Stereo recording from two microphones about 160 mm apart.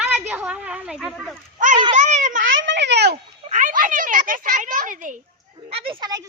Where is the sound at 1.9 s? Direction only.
45° right (ahead or behind).